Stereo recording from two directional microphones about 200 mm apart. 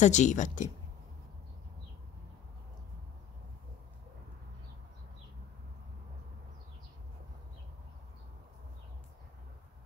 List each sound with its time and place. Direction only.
0.0 s speech: 35° left (ahead or behind)